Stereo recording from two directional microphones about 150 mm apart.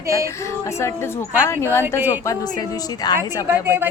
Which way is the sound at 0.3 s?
20° left (ahead or behind).